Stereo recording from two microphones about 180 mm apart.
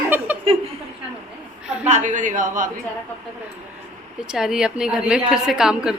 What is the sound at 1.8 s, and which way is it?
Speech, 40° right (ahead or behind).